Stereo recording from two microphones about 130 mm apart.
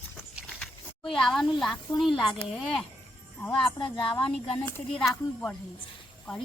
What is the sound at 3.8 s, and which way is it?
Speech, 40° left (ahead or behind).